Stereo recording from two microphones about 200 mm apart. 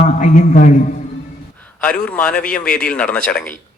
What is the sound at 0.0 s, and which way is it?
Speech, 40° left (ahead or behind).